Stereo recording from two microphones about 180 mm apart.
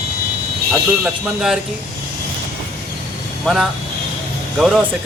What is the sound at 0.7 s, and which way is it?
Speech, 5° right (ahead or behind).